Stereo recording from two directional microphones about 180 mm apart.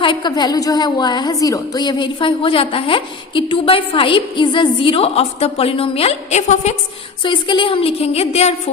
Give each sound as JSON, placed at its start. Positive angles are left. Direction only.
{"t": 0.0, "sound": "a woman's voice", "side_deg": 25}
{"t": 7.2, "sound": "a woman's voice", "side_deg": 25}